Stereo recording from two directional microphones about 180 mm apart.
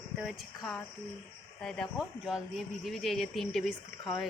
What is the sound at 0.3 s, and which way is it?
Speech, centre (ahead or behind).